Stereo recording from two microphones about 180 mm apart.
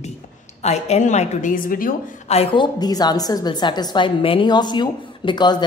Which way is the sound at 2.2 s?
30° left (ahead or behind).